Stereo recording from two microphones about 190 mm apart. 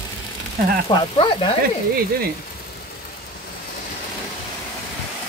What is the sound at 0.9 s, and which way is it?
Speech, 25° left (ahead or behind).